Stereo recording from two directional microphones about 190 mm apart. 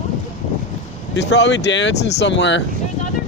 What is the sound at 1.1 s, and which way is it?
Speech, 70° left (ahead or behind).